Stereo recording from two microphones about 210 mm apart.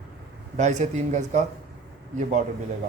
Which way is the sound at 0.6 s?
35° right (ahead or behind).